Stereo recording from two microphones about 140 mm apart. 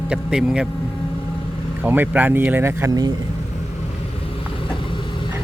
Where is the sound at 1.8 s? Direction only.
15° right (ahead or behind).